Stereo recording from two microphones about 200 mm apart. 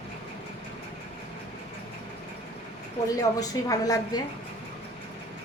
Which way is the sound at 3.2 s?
20° left (ahead or behind).